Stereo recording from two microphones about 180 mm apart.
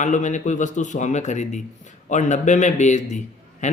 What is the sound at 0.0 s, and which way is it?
A man's voice, 40° left (ahead or behind).